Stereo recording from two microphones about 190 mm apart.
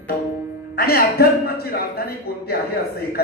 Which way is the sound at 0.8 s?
55° left (ahead or behind).